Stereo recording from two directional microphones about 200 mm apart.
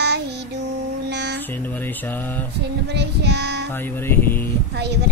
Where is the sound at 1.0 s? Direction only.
60° right (ahead or behind).